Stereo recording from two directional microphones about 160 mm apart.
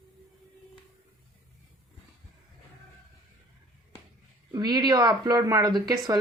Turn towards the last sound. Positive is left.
turn(degrees=-25)  # may be behind; listen again after turning